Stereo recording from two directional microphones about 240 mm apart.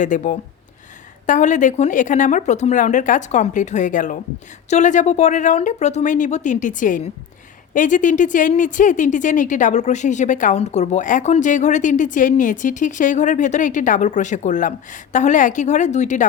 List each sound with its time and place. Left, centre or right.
0.0 s speech: left